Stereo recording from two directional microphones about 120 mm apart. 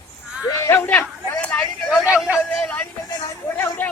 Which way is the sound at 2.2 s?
5° right (ahead or behind).